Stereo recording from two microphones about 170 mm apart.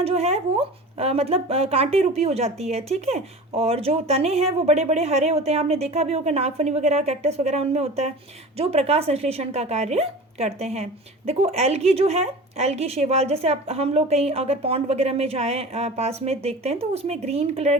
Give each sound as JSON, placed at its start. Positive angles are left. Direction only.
{"t": 0.0, "sound": "speech", "side_deg": -35}